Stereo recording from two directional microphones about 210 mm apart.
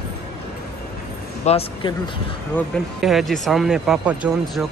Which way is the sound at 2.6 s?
Centre (ahead or behind).